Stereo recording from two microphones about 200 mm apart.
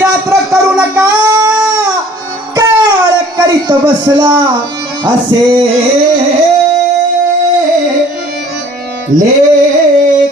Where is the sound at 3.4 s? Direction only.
20° right (ahead or behind).